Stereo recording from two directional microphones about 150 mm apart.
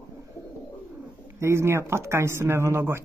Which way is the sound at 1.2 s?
15° right (ahead or behind).